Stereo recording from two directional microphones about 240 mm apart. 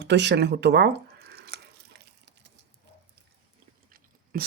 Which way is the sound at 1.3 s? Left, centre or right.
Right.